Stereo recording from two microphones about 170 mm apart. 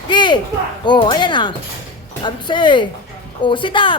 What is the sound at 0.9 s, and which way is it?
Speech, 30° left (ahead or behind).